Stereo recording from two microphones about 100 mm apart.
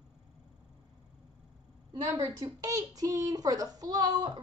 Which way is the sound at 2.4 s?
35° right (ahead or behind).